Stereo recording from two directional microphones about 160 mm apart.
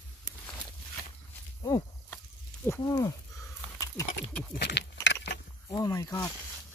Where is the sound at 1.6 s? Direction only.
20° left (ahead or behind).